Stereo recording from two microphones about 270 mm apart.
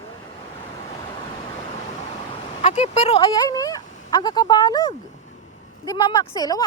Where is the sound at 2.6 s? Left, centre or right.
Left.